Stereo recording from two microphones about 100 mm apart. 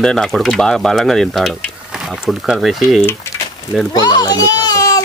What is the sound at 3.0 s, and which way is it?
Speech, 25° left (ahead or behind).